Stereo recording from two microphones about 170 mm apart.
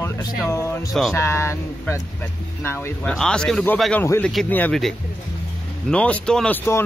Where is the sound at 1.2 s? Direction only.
15° left (ahead or behind).